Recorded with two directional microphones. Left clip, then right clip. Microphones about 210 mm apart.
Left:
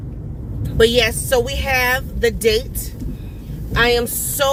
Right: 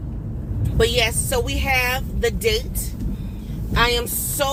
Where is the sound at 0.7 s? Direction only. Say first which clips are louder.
Left 5 dB; 10° left (ahead or behind).